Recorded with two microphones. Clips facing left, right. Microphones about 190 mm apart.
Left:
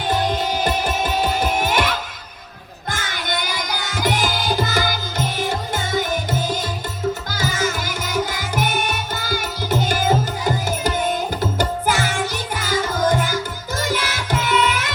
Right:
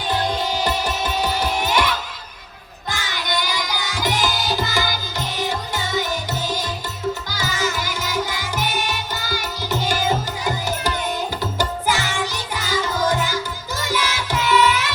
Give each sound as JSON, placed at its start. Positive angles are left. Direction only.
{"t": 0.6, "sound": "music", "side_deg": 50}
{"t": 2.9, "sound": "music", "side_deg": 50}
{"t": 7.3, "sound": "music", "side_deg": 50}
{"t": 11.9, "sound": "music", "side_deg": 50}